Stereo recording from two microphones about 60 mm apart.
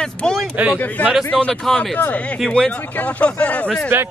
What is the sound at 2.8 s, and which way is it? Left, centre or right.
Speech, left.